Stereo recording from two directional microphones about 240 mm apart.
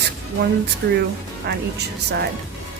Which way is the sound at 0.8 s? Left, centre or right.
Right.